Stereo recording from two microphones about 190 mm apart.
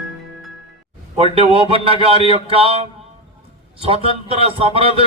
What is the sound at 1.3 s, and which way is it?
Speech, 30° right (ahead or behind).